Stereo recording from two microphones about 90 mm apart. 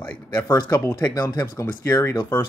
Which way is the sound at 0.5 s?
50° left (ahead or behind).